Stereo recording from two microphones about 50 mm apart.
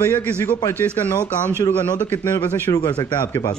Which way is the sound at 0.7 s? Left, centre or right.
Left.